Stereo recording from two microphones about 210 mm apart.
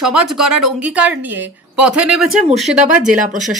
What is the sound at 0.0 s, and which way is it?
Speech, centre (ahead or behind).